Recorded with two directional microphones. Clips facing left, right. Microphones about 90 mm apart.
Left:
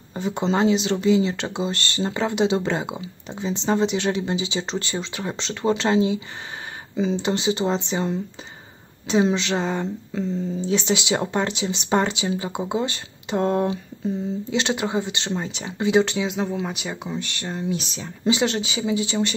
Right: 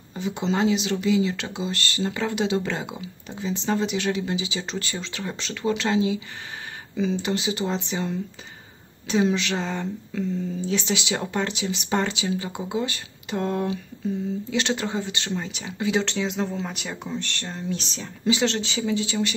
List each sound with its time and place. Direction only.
0.1 s speech: 40° left (ahead or behind)
14.5 s speech: 20° left (ahead or behind)
16.1 s speech: 5° left (ahead or behind); by 19.3 s 25° left (ahead or behind)